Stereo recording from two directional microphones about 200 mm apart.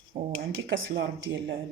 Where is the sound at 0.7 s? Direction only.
70° right (ahead or behind).